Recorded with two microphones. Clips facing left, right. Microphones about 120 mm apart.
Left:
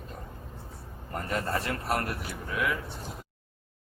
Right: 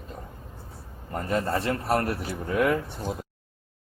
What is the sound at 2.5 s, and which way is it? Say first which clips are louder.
Speech: right 7 dB; 50° right (ahead or behind).